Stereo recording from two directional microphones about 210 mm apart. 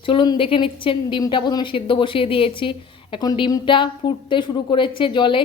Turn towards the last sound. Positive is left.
turn(degrees=25)  # may be behind; listen again after turning